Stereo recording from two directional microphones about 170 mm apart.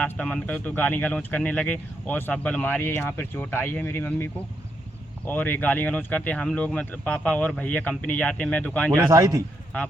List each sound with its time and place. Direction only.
0.0 s speech: 5° left (ahead or behind)
9.0 s a man's voice: 20° right (ahead or behind)